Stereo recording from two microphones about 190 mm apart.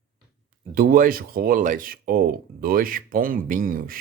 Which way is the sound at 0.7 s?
50° right (ahead or behind).